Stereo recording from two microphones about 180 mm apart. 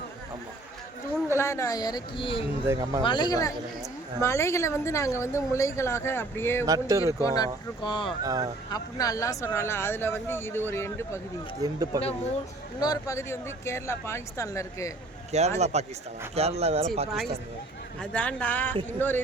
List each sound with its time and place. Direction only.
1.4 s a woman's voice: 15° left (ahead or behind)
2.6 s speech: 20° right (ahead or behind)
3.0 s a woman's voice: 25° left (ahead or behind)
6.7 s speech: 20° right (ahead or behind)
7.2 s a woman's voice: 20° left (ahead or behind)
8.2 s speech: 20° right (ahead or behind)
8.7 s speech: 20° left (ahead or behind)
11.6 s speech: 20° right (ahead or behind)
12.8 s speech: 20° left (ahead or behind)
15.3 s speech: 40° right (ahead or behind)
18.0 s speech: 5° left (ahead or behind)